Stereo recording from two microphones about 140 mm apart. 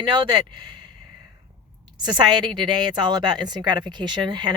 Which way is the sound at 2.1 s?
35° right (ahead or behind).